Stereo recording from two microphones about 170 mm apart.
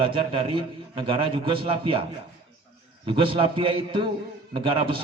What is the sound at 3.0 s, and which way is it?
A man's voice, 30° right (ahead or behind).